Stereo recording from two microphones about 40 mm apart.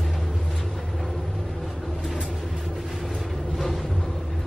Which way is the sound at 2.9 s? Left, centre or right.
Centre.